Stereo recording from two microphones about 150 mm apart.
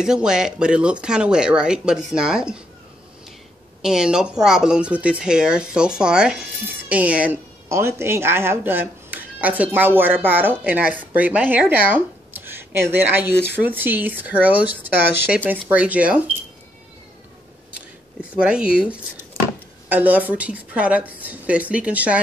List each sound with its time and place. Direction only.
0.0 s speech: 5° right (ahead or behind)
3.8 s speech: 5° right (ahead or behind)
18.3 s speech: 5° right (ahead or behind)